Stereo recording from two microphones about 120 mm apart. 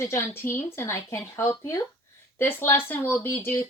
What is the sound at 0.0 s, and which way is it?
Speech, 20° left (ahead or behind).